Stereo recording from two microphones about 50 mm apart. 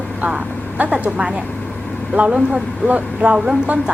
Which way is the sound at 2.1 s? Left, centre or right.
Right.